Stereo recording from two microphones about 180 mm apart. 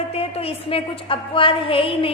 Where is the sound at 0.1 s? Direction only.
35° left (ahead or behind).